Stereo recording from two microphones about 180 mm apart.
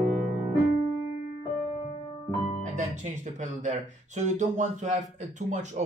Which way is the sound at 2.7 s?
40° right (ahead or behind).